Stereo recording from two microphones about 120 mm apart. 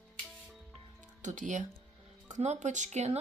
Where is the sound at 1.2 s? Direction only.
90° right.